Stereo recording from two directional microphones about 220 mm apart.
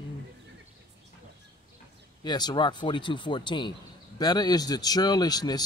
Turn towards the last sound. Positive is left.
turn(degrees=20)  # may be behind; listen again after turning